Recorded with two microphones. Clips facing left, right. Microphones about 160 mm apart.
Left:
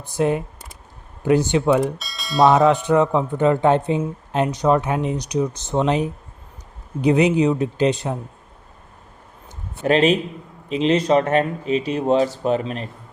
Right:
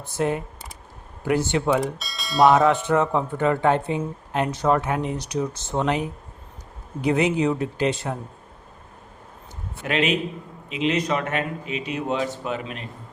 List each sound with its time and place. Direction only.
0.0 s speech: 20° left (ahead or behind)
1.7 s speech: centre (ahead or behind)
2.6 s speech: 15° left (ahead or behind)
9.8 s speech: 35° left (ahead or behind)